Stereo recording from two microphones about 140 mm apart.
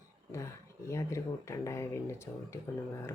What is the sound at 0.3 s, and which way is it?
Speech, 20° left (ahead or behind).